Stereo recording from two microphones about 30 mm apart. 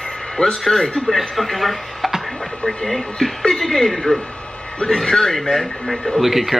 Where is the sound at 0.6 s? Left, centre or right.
Centre.